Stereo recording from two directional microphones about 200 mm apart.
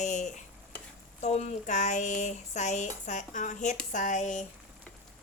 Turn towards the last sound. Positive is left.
turn(degrees=35)  # may be behind; listen again after turning